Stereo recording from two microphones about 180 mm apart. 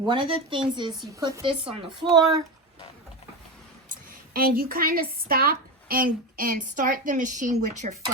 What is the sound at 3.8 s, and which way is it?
A woman's voice, 55° right (ahead or behind).